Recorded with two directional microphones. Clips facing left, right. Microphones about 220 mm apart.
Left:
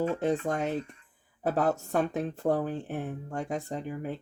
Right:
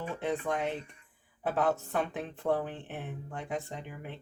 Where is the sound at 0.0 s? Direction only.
40° left (ahead or behind).